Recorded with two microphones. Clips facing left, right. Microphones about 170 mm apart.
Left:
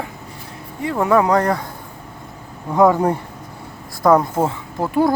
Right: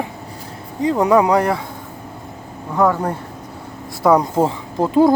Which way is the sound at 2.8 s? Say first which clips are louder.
Left 3 dB; 15° left (ahead or behind).